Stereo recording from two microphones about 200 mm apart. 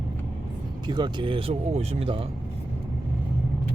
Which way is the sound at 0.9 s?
20° right (ahead or behind).